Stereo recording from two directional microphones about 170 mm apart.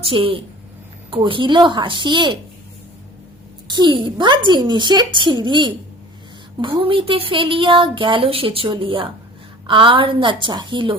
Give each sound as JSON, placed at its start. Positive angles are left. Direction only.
{"t": 0.0, "sound": "a woman's voice", "side_deg": -30}
{"t": 3.7, "sound": "a woman's voice", "side_deg": -25}